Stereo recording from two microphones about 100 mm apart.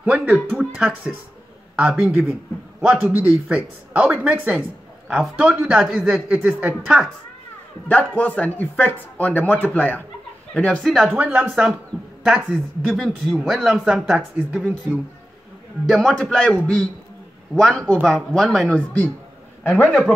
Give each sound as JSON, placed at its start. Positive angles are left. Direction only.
{"t": 0.0, "sound": "speech", "side_deg": -15}
{"t": 0.7, "sound": "speech", "side_deg": -5}
{"t": 8.2, "sound": "speech", "side_deg": 15}
{"t": 10.8, "sound": "speech", "side_deg": 0}
{"t": 11.3, "sound": "speech", "side_deg": -15}
{"t": 12.4, "sound": "speech", "side_deg": 0}
{"t": 15.9, "sound": "speech", "side_deg": 0}